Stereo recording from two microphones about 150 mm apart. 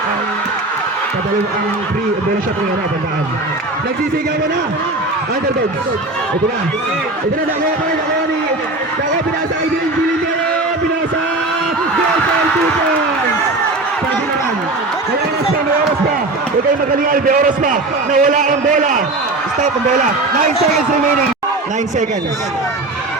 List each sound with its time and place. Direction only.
17.1 s a man's voice: 65° right (ahead or behind)